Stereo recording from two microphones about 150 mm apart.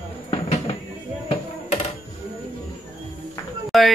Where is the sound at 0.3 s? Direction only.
40° left (ahead or behind).